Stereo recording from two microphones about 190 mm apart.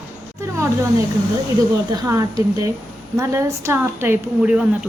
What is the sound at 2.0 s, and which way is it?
A woman's voice, 15° right (ahead or behind).